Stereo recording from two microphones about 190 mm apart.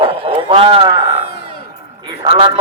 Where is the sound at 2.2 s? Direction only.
30° right (ahead or behind).